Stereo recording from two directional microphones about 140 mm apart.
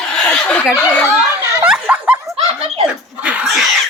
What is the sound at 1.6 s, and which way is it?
Snicker, 10° right (ahead or behind).